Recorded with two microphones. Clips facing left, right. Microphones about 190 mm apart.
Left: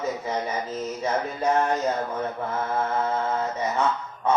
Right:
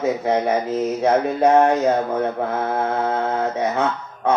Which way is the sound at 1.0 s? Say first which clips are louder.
Right 8 dB; 65° right (ahead or behind).